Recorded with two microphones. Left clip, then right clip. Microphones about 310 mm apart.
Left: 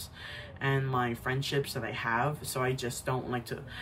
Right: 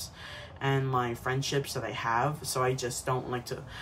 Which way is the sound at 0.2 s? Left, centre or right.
Centre.